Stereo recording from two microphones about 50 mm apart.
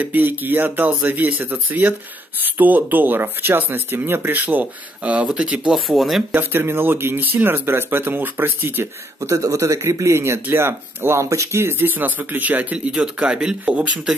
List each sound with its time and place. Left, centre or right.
0.0 s speech: right
5.2 s speech: centre
5.8 s speech: centre
6.3 s speech: right
7.2 s speech: right
9.2 s speech: right
10.5 s speech: right; by 14.1 s centre